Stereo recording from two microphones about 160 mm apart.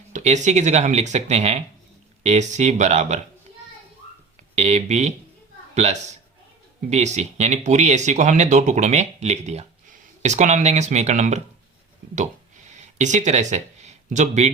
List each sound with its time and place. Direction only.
0.1 s speech: 45° right (ahead or behind)
4.5 s speech: 45° right (ahead or behind)
12.7 s speech: 50° right (ahead or behind)